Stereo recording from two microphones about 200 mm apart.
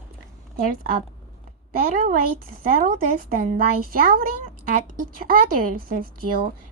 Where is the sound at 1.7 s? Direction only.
45° right (ahead or behind).